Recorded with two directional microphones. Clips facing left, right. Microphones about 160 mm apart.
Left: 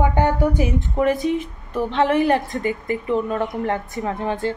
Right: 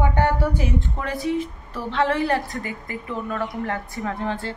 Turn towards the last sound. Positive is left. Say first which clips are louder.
# left 4 dB
turn(degrees=15)  # may be behind; listen again after turning